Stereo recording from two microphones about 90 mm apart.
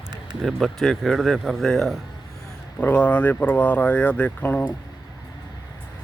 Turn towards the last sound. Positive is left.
turn(degrees=15)  # may be behind; listen again after turning